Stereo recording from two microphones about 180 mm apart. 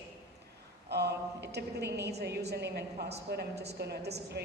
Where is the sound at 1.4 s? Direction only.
65° right (ahead or behind).